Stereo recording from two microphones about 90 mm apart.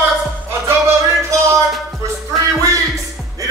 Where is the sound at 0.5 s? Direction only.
30° right (ahead or behind).